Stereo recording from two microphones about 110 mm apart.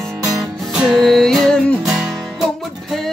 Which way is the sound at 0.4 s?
Centre (ahead or behind).